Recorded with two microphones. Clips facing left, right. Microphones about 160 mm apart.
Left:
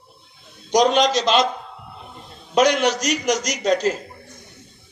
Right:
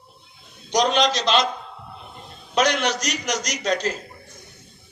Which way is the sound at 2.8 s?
10° left (ahead or behind).